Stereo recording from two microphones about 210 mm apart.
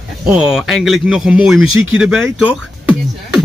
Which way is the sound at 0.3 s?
5° right (ahead or behind).